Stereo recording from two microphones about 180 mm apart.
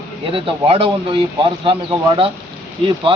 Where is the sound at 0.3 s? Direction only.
30° right (ahead or behind).